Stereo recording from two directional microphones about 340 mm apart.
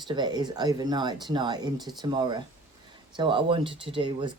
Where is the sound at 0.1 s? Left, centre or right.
Centre.